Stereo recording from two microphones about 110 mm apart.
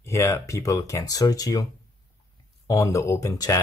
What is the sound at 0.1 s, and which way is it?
Speech, 25° left (ahead or behind).